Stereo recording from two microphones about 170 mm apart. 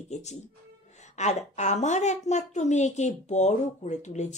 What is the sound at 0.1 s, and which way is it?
A woman's voice, 40° left (ahead or behind).